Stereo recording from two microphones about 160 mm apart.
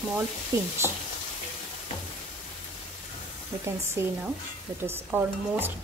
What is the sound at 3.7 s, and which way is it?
A woman's voice, 15° right (ahead or behind).